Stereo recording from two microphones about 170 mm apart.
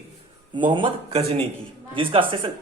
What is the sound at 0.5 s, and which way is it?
Speech, 30° right (ahead or behind).